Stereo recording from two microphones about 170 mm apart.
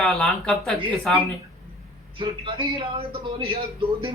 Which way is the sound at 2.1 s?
30° right (ahead or behind).